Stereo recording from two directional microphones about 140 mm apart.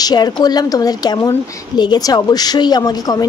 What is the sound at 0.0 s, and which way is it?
A woman's voice, 30° left (ahead or behind).